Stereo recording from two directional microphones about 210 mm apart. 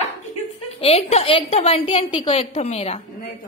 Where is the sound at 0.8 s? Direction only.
30° left (ahead or behind).